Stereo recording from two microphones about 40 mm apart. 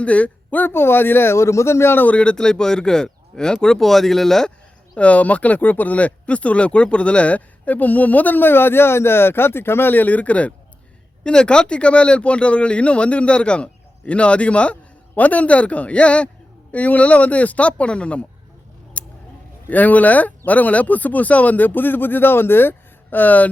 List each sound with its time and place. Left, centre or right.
0.0 s speech: left
0.7 s a man's voice: left
2.0 s speech: left
3.8 s speech: centre
4.9 s speech: left
9.9 s speech: left
11.2 s speech: left
15.1 s speech: left
16.7 s speech: left
19.7 s speech: left